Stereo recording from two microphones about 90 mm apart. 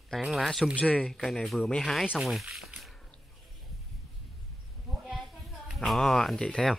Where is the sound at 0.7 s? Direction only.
15° left (ahead or behind).